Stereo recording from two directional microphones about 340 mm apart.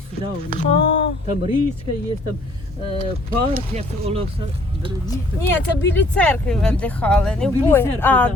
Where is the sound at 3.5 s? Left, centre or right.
Centre.